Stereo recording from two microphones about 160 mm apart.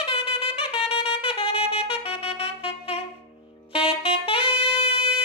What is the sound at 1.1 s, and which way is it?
Saxophone, 35° left (ahead or behind).